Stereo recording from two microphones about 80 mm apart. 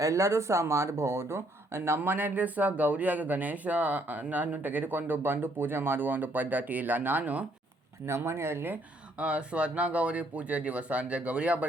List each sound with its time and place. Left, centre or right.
0.0 s speech: right; by 7.4 s centre
8.0 s speech: right
9.1 s speech: centre